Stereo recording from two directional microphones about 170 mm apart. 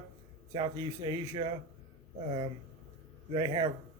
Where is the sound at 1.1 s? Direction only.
25° right (ahead or behind).